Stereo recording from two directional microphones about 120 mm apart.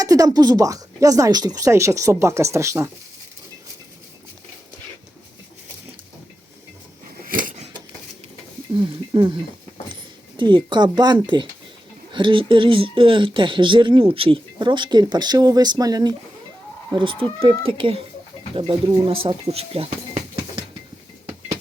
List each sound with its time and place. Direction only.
0.0 s speech: 30° right (ahead or behind)
8.7 s a sound: 40° right (ahead or behind)
9.9 s speech: 40° right (ahead or behind)
16.9 s speech: 45° right (ahead or behind)
19.0 s speech: 50° right (ahead or behind)